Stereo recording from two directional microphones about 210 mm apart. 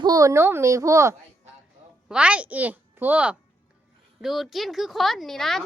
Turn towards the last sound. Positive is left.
turn(degrees=0)  # may be behind; listen again after turning